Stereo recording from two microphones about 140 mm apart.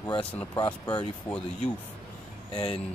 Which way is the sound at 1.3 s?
10° left (ahead or behind).